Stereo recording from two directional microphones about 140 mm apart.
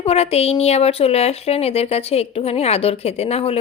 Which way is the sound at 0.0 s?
45° left (ahead or behind).